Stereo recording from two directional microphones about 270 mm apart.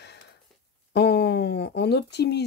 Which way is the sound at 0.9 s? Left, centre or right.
Left.